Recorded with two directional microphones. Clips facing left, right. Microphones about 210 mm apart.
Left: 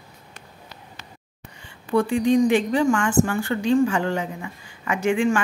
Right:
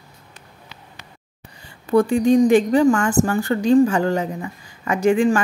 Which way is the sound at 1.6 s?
40° right (ahead or behind).